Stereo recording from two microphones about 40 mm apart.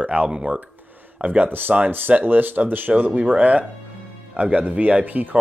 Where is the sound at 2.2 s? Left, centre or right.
Right.